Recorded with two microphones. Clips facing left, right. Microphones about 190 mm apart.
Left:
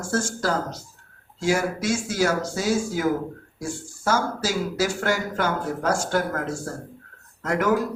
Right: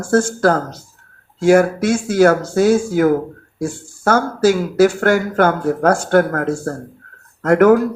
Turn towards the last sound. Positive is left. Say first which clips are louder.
# right 11 dB
turn(degrees=-60)  # may be behind; listen again after turning